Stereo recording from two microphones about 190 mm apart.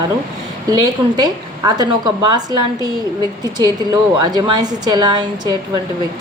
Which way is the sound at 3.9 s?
20° right (ahead or behind).